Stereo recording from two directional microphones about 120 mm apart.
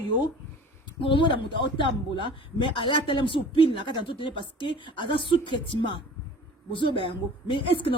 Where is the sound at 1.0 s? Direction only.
45° left (ahead or behind).